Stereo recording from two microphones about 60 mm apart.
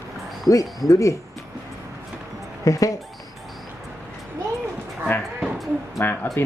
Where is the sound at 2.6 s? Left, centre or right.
Left.